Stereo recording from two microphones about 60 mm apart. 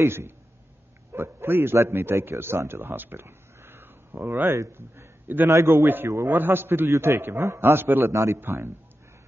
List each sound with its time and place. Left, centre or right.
0.0 s a man's voice: right
5.5 s a man's voice: right
6.2 s a man's voice: right
6.9 s a man's voice: right
7.2 s a man's voice: right
8.1 s a man's voice: right
8.4 s a man's voice: right